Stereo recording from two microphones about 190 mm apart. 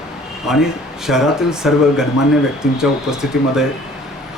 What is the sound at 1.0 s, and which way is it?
Speech, centre (ahead or behind).